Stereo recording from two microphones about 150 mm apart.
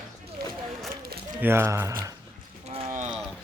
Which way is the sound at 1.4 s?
15° right (ahead or behind).